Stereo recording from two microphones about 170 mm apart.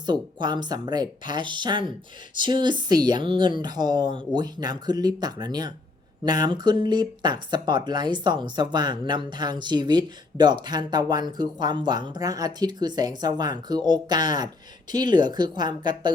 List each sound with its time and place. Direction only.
0.0 s speech: 25° right (ahead or behind)